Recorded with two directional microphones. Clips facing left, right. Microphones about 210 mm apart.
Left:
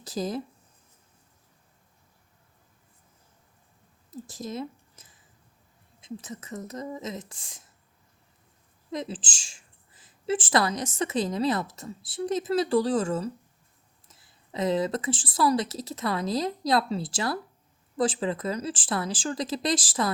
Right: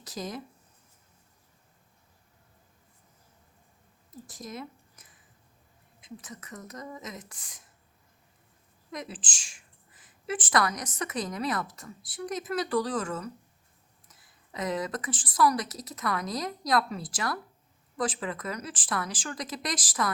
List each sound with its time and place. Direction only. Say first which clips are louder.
0.0 s speech: left 6 dB; 30° left (ahead or behind)
4.1 s a sound: left 6 dB; 25° left (ahead or behind)
6.0 s a woman's voice: left 6 dB; 25° left (ahead or behind)
8.9 s a woman's voice: left 6 dB; 25° left (ahead or behind)